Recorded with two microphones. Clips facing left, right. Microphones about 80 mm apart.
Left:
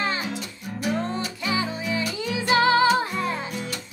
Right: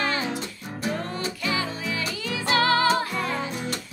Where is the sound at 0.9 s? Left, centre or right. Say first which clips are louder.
Left 3 dB; left.